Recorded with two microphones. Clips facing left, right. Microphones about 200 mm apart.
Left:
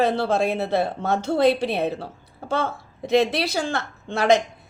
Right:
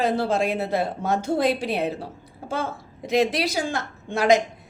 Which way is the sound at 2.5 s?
65° left (ahead or behind).